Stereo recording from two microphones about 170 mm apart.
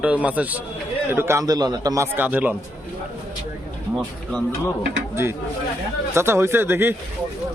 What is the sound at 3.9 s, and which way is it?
Speech, centre (ahead or behind).